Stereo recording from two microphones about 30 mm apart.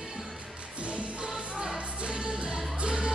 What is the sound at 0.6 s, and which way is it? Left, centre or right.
Music, right.